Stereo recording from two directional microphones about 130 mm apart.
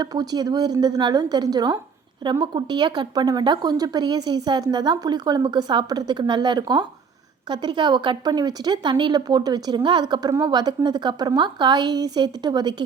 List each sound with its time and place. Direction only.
0.0 s a woman's voice: 30° right (ahead or behind)